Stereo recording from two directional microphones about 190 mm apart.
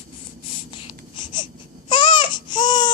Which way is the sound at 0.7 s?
25° left (ahead or behind).